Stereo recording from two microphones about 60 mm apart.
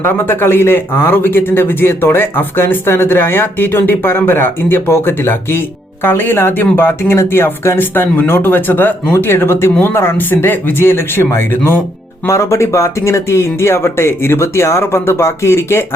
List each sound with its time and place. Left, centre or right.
0.0 s speech: left
12.3 s speech: left